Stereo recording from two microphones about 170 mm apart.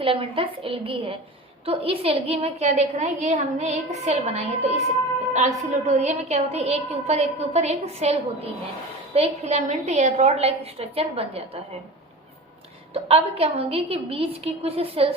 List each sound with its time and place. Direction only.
0.0 s a woman's voice: 35° right (ahead or behind)
12.9 s a woman's voice: 35° right (ahead or behind)